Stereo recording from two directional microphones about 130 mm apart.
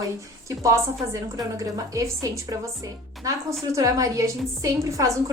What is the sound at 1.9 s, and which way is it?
A woman's voice, 25° right (ahead or behind).